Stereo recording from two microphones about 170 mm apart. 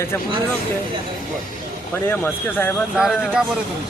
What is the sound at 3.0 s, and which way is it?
Speech, 5° right (ahead or behind).